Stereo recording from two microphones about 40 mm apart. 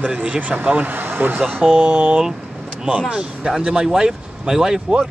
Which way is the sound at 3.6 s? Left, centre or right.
Right.